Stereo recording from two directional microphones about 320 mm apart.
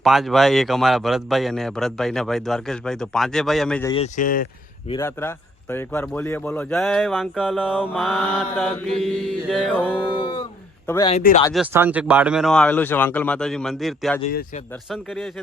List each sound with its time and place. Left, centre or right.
0.0 s speech: centre
3.9 s speech: left
4.9 s speech: centre
10.0 s speech: centre
11.1 s speech: left
11.5 s speech: centre
14.2 s speech: left
14.8 s speech: centre